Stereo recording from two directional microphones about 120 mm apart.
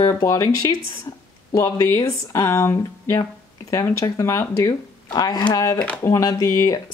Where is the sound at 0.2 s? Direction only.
25° left (ahead or behind).